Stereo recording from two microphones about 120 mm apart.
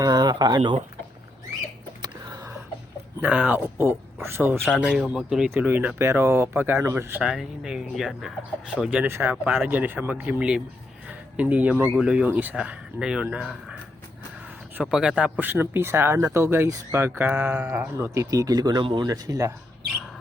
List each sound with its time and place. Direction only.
0.0 s speech: 35° right (ahead or behind)
2.0 s a sound: 35° right (ahead or behind)
3.2 s speech: 10° right (ahead or behind)
4.6 s speech: 5° right (ahead or behind)
5.5 s speech: 15° right (ahead or behind)
7.2 s speech: 5° right (ahead or behind)
9.4 s speech: 5° right (ahead or behind)
9.6 s speech: 15° right (ahead or behind)
14.8 s speech: 5° right (ahead or behind); by 19.5 s 30° right (ahead or behind)